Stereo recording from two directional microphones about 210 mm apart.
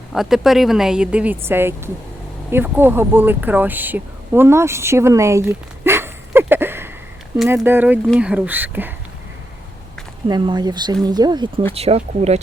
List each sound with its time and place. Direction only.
0.1 s speech: centre (ahead or behind)
10.2 s speech: 20° right (ahead or behind)